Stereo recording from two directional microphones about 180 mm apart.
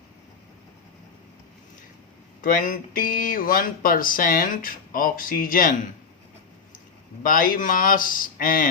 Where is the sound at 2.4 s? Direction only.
50° left (ahead or behind).